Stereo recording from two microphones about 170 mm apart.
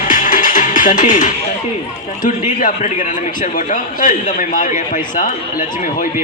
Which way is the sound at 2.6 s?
50° left (ahead or behind).